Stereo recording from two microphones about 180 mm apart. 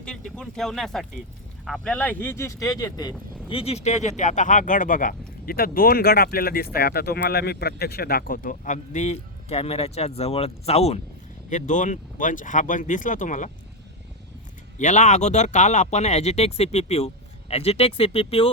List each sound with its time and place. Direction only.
0.0 s speech: 5° left (ahead or behind); by 3.2 s 20° left (ahead or behind)
3.5 s speech: 35° left (ahead or behind)
14.8 s speech: 40° left (ahead or behind)